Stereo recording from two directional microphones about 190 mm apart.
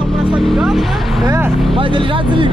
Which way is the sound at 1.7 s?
25° right (ahead or behind).